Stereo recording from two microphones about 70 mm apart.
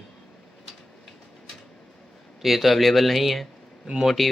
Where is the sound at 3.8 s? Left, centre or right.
Centre.